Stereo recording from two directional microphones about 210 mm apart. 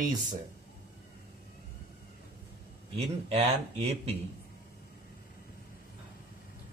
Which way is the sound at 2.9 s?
30° right (ahead or behind).